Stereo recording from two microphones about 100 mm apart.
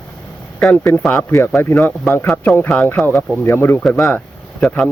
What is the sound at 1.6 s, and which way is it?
Speech, 20° left (ahead or behind).